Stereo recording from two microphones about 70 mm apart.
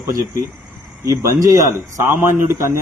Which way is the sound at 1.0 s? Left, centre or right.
Right.